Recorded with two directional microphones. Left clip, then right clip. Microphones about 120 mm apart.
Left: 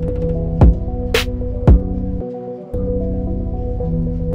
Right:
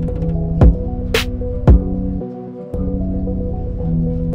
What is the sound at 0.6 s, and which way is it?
Music, 25° left (ahead or behind).